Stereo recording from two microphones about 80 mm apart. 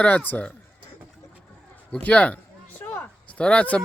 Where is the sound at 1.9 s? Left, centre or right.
Centre.